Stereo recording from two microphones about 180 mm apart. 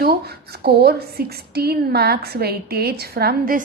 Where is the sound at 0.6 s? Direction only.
60° right (ahead or behind).